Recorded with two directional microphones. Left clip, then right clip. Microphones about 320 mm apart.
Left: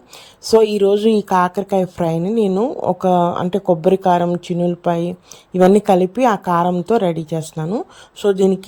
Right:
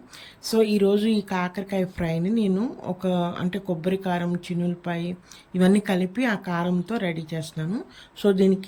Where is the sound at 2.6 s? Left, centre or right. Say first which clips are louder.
Left 12 dB; left.